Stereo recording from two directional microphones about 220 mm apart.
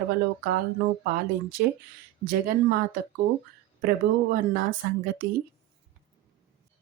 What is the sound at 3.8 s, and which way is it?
Speech, 40° right (ahead or behind).